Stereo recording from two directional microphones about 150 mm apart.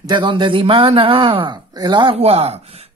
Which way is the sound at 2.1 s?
45° right (ahead or behind).